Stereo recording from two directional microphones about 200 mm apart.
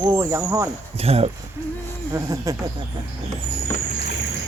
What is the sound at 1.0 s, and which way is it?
Speech, 30° right (ahead or behind).